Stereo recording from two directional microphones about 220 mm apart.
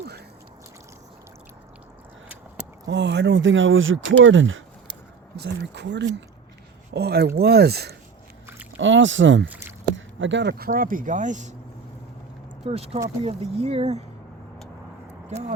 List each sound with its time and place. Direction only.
2.8 s speech: 50° right (ahead or behind)
5.4 s speech: 50° right (ahead or behind)
8.8 s speech: 55° right (ahead or behind)
9.5 s rowboat: 10° right (ahead or behind)
9.9 s speech: 55° right (ahead or behind)
10.7 s speech: 40° right (ahead or behind)
12.6 s speech: 25° right (ahead or behind)